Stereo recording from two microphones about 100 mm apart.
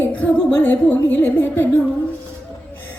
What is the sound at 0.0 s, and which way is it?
Music, 15° left (ahead or behind).